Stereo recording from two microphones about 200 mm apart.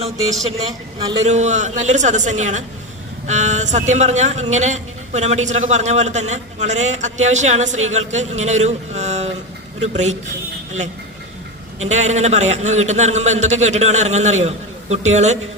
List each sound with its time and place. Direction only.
0.9 s a man's voice: 20° right (ahead or behind)
1.2 s speech: 35° right (ahead or behind)
11.8 s speech: 35° right (ahead or behind)